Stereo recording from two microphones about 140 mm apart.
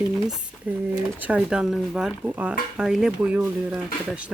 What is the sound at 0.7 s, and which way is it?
Speech, 10° right (ahead or behind).